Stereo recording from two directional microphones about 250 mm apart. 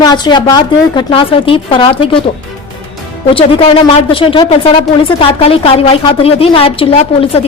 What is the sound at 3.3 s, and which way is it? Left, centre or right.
Speech, left.